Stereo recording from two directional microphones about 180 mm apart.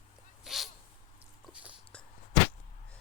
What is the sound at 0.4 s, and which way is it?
Dog, centre (ahead or behind).